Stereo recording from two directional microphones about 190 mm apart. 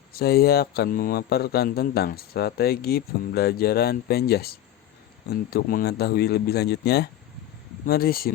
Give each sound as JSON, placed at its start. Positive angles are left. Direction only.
{"t": 0.1, "sound": "speech", "side_deg": 55}